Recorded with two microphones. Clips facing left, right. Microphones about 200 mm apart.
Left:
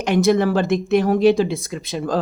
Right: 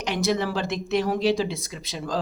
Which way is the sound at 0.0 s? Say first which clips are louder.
Left 8 dB; 50° left (ahead or behind).